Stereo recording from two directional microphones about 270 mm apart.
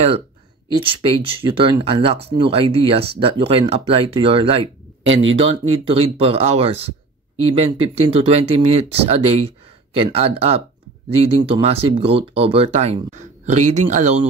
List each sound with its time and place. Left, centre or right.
0.7 s speech: centre
5.0 s speech: right
5.3 s speech: right